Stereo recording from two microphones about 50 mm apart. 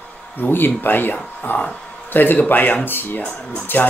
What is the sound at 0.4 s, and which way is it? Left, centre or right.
Speech, left.